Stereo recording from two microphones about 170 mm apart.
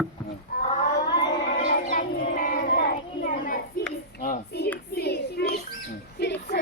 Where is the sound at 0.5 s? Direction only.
60° left (ahead or behind).